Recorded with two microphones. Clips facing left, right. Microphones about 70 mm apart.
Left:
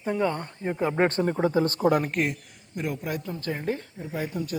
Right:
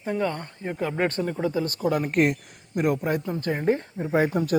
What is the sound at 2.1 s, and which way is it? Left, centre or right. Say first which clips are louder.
Speech: right 6 dB; right.